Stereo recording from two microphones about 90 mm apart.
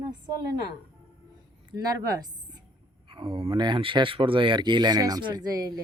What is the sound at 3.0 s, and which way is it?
Speech, 65° right (ahead or behind).